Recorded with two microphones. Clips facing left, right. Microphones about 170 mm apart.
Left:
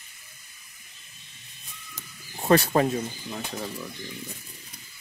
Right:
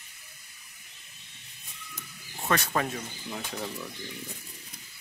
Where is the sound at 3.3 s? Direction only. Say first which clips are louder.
Left 2 dB; 15° left (ahead or behind).